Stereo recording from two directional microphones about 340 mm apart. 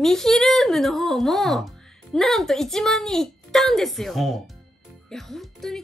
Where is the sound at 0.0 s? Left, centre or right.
Centre.